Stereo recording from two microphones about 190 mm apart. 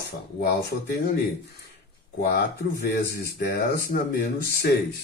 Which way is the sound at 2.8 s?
55° left (ahead or behind).